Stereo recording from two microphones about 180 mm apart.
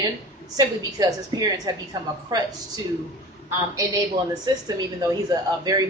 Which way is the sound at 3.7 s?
20° right (ahead or behind).